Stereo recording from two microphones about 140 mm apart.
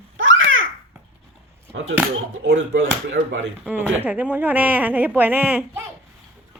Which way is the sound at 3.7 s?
10° right (ahead or behind).